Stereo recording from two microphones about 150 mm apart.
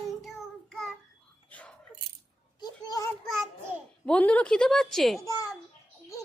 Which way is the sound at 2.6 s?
25° left (ahead or behind).